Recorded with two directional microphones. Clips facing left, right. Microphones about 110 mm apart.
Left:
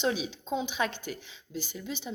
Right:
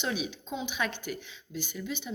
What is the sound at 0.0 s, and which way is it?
Speech, 35° left (ahead or behind).